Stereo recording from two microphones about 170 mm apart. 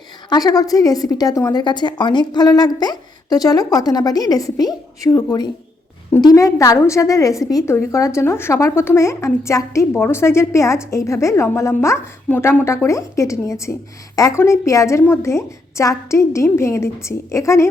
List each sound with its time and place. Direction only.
0.3 s a woman's voice: 20° left (ahead or behind)